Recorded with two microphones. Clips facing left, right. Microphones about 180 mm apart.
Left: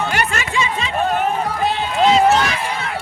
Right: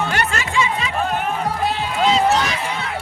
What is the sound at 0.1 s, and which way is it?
Chatter, 15° left (ahead or behind).